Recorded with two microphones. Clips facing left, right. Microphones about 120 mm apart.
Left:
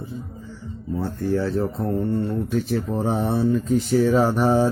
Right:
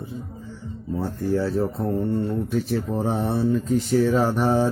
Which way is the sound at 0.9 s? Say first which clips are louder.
Even; 10° right (ahead or behind).